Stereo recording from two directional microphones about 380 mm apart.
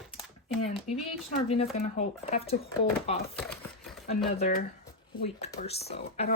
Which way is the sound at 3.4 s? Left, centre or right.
Centre.